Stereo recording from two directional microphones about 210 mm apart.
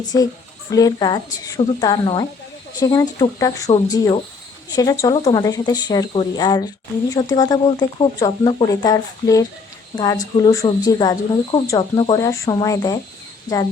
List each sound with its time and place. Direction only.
0.7 s speech: 15° left (ahead or behind)